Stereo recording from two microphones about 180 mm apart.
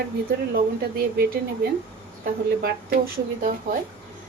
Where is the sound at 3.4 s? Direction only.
50° right (ahead or behind).